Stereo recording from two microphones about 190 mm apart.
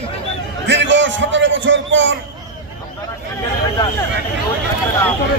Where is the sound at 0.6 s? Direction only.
70° right (ahead or behind).